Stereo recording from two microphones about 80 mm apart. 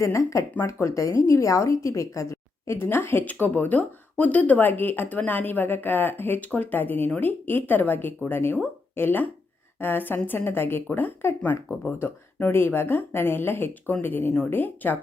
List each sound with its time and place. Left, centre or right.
0.0 s a woman's voice: left